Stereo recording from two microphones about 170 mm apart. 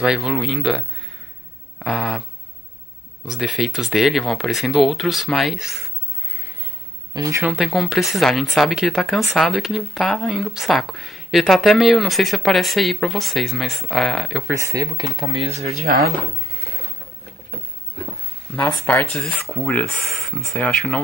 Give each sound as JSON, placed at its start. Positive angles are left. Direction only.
{"t": 0.0, "sound": "speech", "side_deg": 0}
{"t": 1.8, "sound": "a sound", "side_deg": 0}
{"t": 3.3, "sound": "speech", "side_deg": 0}
{"t": 7.2, "sound": "speech", "side_deg": -15}
{"t": 7.5, "sound": "speech", "side_deg": 0}
{"t": 14.5, "sound": "speech", "side_deg": -20}
{"t": 15.3, "sound": "speech", "side_deg": -35}
{"t": 15.8, "sound": "speech", "side_deg": -65}
{"t": 18.9, "sound": "speech", "side_deg": 5}